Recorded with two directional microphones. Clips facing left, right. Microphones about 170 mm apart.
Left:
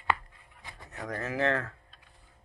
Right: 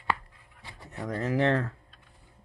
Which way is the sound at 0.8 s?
25° right (ahead or behind).